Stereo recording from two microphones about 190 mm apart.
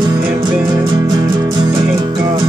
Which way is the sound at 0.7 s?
20° right (ahead or behind).